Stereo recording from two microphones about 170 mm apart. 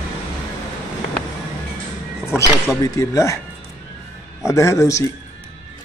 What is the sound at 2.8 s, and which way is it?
Speech, 20° left (ahead or behind).